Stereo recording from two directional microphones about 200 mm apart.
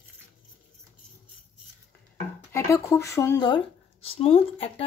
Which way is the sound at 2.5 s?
15° left (ahead or behind).